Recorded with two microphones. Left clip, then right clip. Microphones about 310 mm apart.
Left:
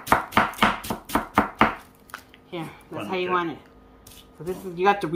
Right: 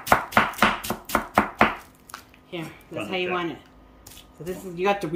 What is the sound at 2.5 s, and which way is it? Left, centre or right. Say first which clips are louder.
Speech: even; centre.